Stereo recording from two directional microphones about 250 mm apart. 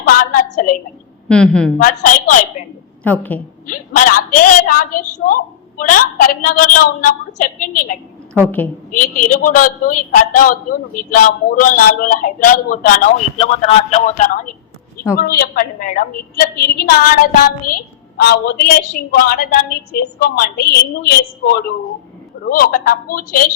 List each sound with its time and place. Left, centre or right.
0.1 s a man's voice: left
1.3 s a woman's voice: centre
1.8 s a man's voice: left
3.0 s a woman's voice: centre
3.7 s a man's voice: left
8.3 s a woman's voice: centre
8.9 s a man's voice: left
17.6 s a woman's voice: left
18.2 s a man's voice: left